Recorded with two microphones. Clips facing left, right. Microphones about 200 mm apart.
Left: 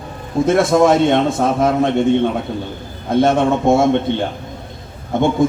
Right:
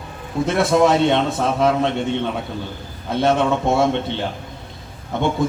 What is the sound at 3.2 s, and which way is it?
Speech, 50° left (ahead or behind).